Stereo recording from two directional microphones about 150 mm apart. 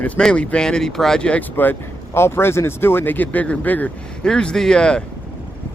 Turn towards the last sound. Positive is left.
turn(degrees=5)  # may be behind; listen again after turning